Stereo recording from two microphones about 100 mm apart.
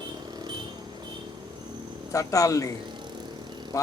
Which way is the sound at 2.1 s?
35° left (ahead or behind).